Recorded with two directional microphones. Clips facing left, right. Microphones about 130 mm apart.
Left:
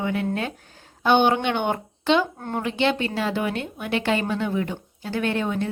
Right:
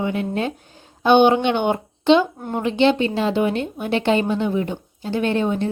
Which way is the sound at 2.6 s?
25° right (ahead or behind).